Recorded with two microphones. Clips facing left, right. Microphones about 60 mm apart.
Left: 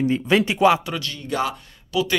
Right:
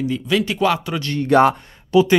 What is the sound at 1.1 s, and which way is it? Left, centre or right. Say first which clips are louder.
Speech: right 12 dB; right.